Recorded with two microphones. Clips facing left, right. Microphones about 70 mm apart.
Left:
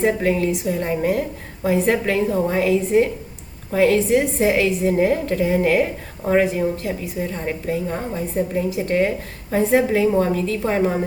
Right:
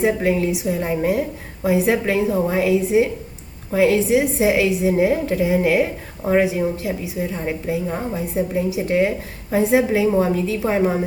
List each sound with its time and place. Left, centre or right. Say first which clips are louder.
0.0 s a woman's voice: even; centre